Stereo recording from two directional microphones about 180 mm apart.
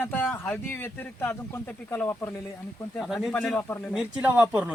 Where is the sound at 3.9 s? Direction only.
5° right (ahead or behind).